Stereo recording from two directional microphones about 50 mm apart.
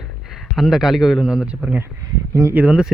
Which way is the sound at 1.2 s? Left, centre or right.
Centre.